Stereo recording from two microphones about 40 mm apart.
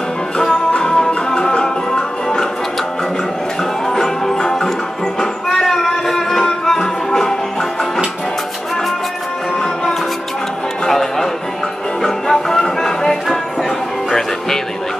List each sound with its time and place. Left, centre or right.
0.7 s music: left
3.8 s music: centre
10.9 s music: centre